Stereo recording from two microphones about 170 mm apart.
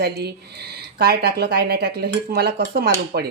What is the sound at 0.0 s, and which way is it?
Speech, 70° right (ahead or behind).